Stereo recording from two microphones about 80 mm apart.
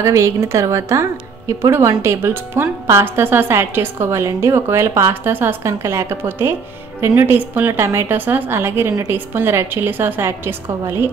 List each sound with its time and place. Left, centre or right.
0.0 s a woman's voice: right